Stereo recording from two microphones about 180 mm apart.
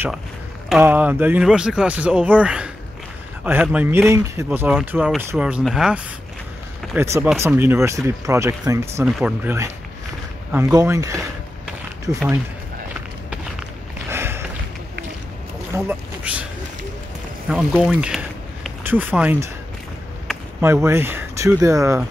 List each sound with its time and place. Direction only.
0.7 s speech: 5° right (ahead or behind)
7.0 s speech: 10° right (ahead or behind)
14.1 s a sound: 15° right (ahead or behind)
15.7 s speech: 10° right (ahead or behind)
17.5 s a sound: 5° right (ahead or behind)
18.9 s speech: 10° right (ahead or behind)
20.6 s speech: 15° right (ahead or behind)